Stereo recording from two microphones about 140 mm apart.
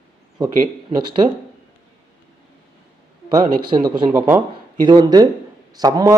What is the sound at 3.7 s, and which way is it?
Speech, 40° right (ahead or behind).